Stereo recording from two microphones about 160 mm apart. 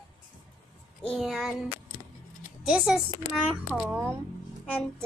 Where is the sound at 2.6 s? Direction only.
5° right (ahead or behind).